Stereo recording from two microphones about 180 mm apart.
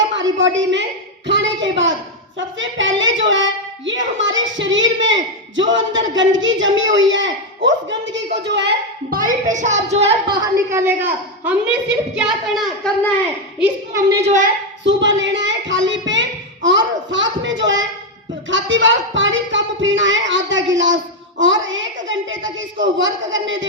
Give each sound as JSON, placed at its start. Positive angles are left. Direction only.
{"t": 0.2, "sound": "a woman's voice", "side_deg": -90}
{"t": 1.3, "sound": "a sound", "side_deg": -90}
{"t": 2.6, "sound": "speech", "side_deg": -90}
{"t": 10.7, "sound": "a woman's voice", "side_deg": -10}
{"t": 13.6, "sound": "a woman's voice", "side_deg": -15}
{"t": 14.8, "sound": "speech", "side_deg": -90}